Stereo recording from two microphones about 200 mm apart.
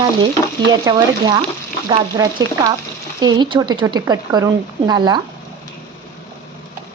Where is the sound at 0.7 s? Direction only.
20° right (ahead or behind).